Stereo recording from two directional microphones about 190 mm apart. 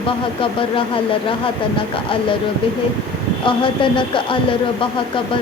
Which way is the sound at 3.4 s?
25° left (ahead or behind).